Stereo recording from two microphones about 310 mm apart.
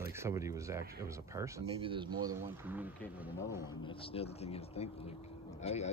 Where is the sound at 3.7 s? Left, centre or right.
Centre.